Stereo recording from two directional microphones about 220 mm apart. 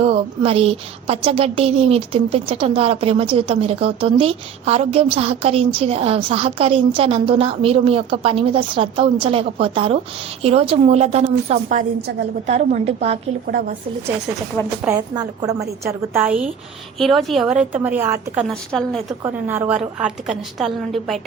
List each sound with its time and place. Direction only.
0.0 s a woman's voice: 25° right (ahead or behind)
13.5 s speech: 40° right (ahead or behind)
14.8 s a woman's voice: 15° right (ahead or behind)
18.4 s a woman's voice: centre (ahead or behind)
19.2 s a woman's voice: 10° right (ahead or behind)